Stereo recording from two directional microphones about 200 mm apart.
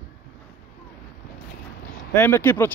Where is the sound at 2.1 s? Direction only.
10° left (ahead or behind).